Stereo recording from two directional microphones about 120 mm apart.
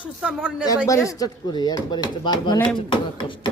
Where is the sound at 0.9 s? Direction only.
30° left (ahead or behind).